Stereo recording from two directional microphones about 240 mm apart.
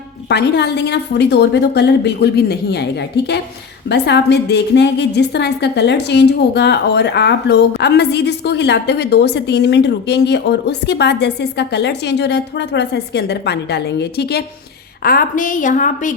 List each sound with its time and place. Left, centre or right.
0.3 s a woman's voice: left